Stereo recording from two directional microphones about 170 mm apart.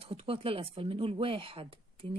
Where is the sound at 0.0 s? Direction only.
35° right (ahead or behind).